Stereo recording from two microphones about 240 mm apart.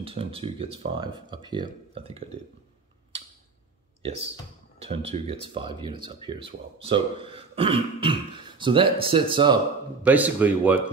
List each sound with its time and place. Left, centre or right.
0.0 s speech: right
4.8 s speech: right
10.0 s a man's voice: centre